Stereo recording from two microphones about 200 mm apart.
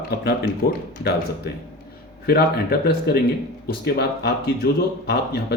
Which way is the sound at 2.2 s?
50° left (ahead or behind).